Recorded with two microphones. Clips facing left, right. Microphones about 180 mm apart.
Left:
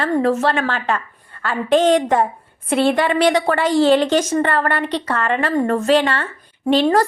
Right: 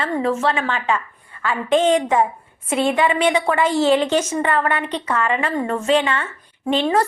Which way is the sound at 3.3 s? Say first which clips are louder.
Left 2 dB; 35° left (ahead or behind).